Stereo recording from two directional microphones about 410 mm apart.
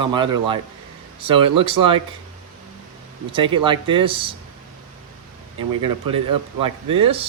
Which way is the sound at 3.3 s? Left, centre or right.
Centre.